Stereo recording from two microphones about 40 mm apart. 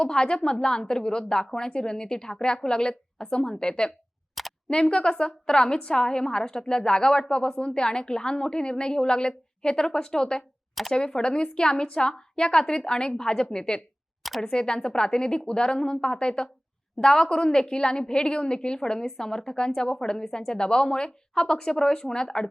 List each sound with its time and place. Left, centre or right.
0.0 s a woman's voice: left
4.4 s camera: centre
4.7 s a woman's voice: left
14.2 s a sound: centre
14.4 s a woman's voice: centre